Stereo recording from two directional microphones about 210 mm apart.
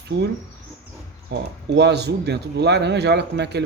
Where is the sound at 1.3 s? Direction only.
50° right (ahead or behind).